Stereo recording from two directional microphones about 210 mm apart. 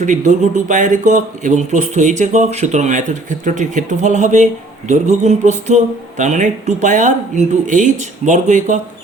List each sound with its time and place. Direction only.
0.0 s speech: 35° right (ahead or behind)